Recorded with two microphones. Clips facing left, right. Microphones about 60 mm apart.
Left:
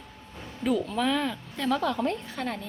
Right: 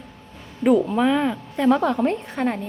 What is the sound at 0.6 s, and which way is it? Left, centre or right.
A woman's voice, right.